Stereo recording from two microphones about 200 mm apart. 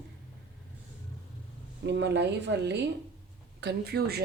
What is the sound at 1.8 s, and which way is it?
Speech, 60° right (ahead or behind).